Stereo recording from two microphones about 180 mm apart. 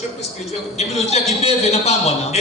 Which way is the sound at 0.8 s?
35° left (ahead or behind).